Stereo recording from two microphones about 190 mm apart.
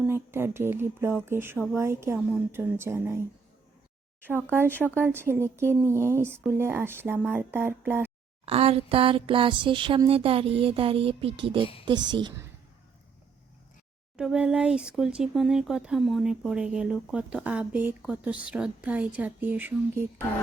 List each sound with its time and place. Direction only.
0.0 s a woman's voice: 10° right (ahead or behind)
8.4 s a sound: 30° right (ahead or behind)
14.2 s speech: 5° right (ahead or behind)